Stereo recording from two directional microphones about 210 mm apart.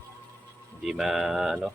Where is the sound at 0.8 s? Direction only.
Centre (ahead or behind).